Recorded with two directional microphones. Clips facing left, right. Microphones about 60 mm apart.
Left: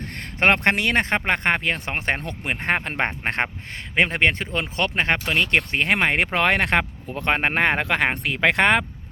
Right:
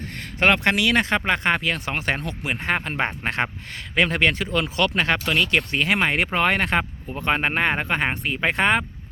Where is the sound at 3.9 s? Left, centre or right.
Left.